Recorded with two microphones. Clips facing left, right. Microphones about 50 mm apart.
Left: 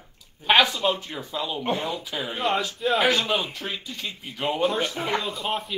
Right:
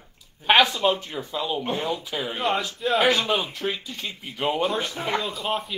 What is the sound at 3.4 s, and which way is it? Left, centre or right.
Speech, centre.